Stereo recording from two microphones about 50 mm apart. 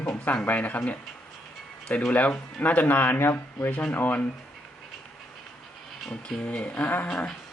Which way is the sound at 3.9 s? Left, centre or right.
Left.